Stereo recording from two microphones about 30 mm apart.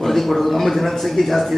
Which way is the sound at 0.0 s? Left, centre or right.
Centre.